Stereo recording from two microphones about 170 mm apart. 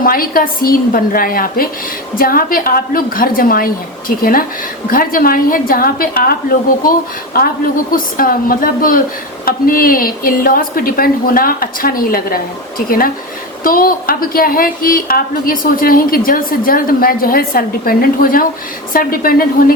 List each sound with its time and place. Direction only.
0.0 s a woman's voice: 60° left (ahead or behind)
7.3 s a woman's voice: 60° left (ahead or behind)
13.7 s a woman's voice: 55° left (ahead or behind)